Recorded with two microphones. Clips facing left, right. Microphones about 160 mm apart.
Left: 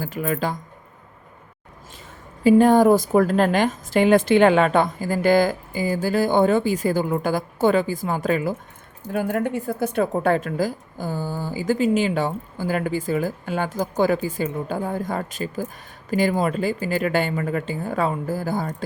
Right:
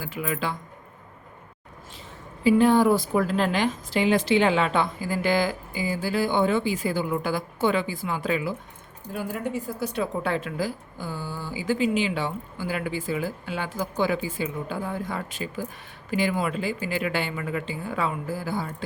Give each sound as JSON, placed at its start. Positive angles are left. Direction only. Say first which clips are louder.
{"t": 0.0, "sound": "speech", "louder": "left 5 dB", "side_deg": 45}
{"t": 2.4, "sound": "speech", "louder": "left 4 dB", "side_deg": 45}
{"t": 9.1, "sound": "speech", "louder": "left 6 dB", "side_deg": 60}